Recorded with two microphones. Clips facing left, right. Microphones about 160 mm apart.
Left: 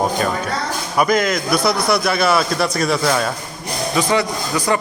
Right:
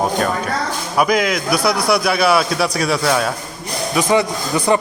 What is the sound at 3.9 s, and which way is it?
Speech, 20° right (ahead or behind).